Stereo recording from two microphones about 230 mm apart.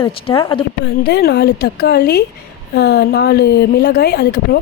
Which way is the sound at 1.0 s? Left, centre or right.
Left.